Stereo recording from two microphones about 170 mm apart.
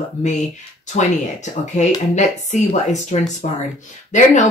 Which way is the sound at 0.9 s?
45° left (ahead or behind).